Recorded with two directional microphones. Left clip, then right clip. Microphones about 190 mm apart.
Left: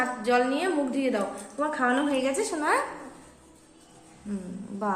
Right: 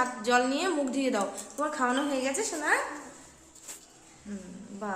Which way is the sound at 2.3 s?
10° left (ahead or behind).